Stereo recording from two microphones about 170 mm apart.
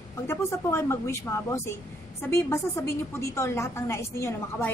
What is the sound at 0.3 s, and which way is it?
A woman's voice, 15° left (ahead or behind).